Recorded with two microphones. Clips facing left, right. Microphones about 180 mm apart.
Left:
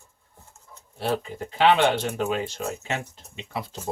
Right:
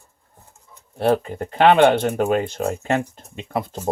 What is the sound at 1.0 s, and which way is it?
Speech, 55° right (ahead or behind).